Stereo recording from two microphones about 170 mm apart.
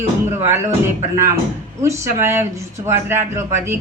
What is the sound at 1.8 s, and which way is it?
A woman's voice, 15° right (ahead or behind).